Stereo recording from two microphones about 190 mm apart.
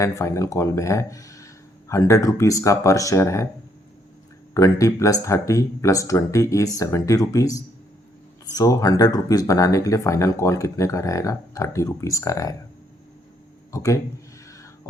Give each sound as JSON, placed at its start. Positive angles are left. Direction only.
{"t": 0.0, "sound": "speech", "side_deg": 15}
{"t": 4.5, "sound": "speech", "side_deg": 15}
{"t": 13.7, "sound": "speech", "side_deg": 15}